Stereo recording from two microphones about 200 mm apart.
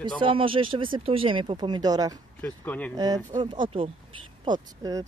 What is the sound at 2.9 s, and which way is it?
Speech, 20° right (ahead or behind).